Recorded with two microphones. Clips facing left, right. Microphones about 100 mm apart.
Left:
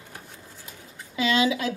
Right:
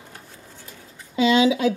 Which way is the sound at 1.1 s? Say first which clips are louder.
Right 5 dB; 25° right (ahead or behind).